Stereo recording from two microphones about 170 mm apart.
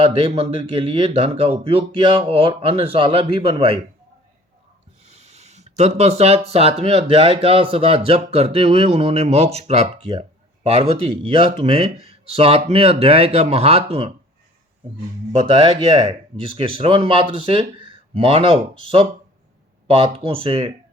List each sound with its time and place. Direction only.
0.0 s speech: 35° right (ahead or behind)
5.0 s speech: 40° right (ahead or behind)
15.3 s speech: 35° right (ahead or behind)